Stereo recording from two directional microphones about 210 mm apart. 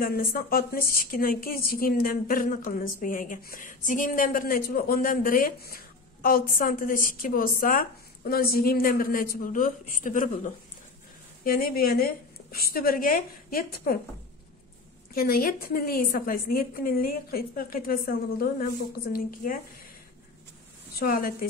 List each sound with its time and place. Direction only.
0.0 s a woman's voice: 45° left (ahead or behind)
15.1 s a woman's voice: 45° left (ahead or behind)
21.0 s a woman's voice: 45° left (ahead or behind)